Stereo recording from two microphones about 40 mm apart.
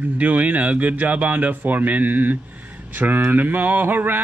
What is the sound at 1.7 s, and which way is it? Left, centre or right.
Speech, right.